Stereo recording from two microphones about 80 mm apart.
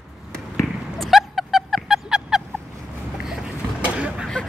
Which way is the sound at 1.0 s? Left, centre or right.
Centre.